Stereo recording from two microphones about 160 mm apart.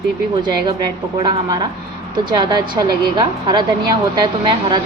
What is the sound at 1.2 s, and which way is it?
Speech, 35° right (ahead or behind).